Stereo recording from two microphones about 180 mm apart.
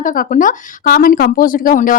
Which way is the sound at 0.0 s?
50° left (ahead or behind).